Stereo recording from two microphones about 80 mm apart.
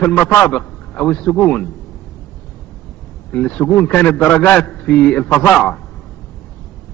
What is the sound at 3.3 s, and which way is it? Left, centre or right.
A man's voice, centre.